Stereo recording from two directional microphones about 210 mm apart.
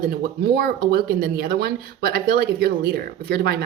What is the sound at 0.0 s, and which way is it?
Speech, 45° right (ahead or behind).